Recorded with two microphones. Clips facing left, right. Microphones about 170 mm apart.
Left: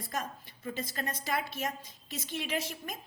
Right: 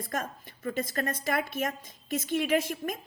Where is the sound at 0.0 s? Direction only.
50° right (ahead or behind).